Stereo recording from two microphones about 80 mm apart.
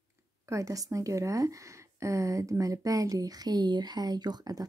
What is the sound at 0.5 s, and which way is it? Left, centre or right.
Speech, right.